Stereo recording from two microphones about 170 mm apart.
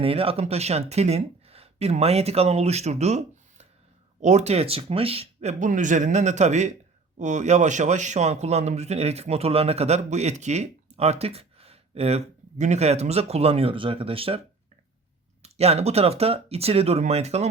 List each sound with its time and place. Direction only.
0.0 s a man's voice: 35° right (ahead or behind)